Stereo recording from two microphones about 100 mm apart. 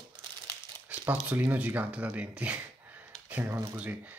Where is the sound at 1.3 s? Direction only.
15° right (ahead or behind).